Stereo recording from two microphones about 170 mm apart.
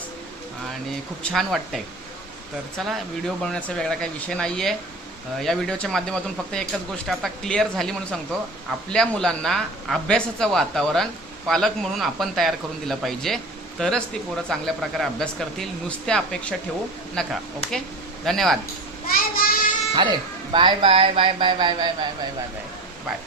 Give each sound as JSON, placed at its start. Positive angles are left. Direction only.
{"t": 1.3, "sound": "speech", "side_deg": 0}
{"t": 19.1, "sound": "a child's voice", "side_deg": 60}
{"t": 19.9, "sound": "speech", "side_deg": -25}